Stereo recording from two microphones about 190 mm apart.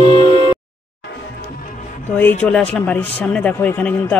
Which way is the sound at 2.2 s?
10° left (ahead or behind).